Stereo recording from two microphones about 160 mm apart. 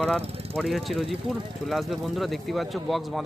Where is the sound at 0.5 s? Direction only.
Centre (ahead or behind).